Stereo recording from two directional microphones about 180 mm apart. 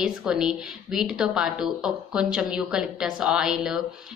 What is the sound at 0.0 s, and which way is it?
A woman's voice, 5° right (ahead or behind).